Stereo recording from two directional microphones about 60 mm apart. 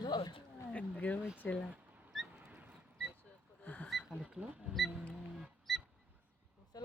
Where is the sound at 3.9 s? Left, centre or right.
Centre.